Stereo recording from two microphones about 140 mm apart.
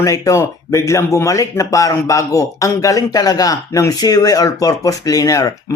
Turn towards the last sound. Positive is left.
turn(degrees=25)  # may be behind; listen again after turning